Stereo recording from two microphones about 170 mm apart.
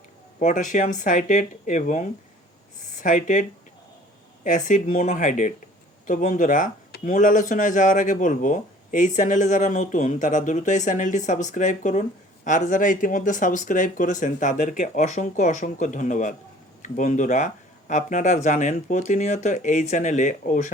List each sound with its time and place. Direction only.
0.3 s speech: 45° left (ahead or behind)
4.4 s speech: 45° left (ahead or behind)